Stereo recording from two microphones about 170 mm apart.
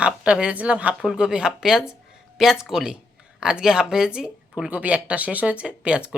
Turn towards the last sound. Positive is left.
turn(degrees=-5)  # may be behind; listen again after turning